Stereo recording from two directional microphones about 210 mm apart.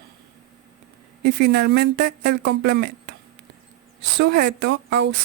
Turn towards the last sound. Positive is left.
turn(degrees=-55)  # may be behind; listen again after turning